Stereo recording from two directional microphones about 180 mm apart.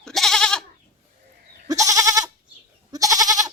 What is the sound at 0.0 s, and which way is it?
Goat, centre (ahead or behind).